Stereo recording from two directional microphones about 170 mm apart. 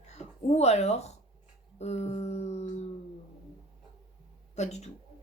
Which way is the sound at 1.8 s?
40° left (ahead or behind).